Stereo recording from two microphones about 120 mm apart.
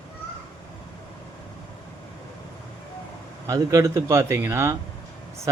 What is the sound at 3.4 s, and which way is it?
Speech, 30° right (ahead or behind).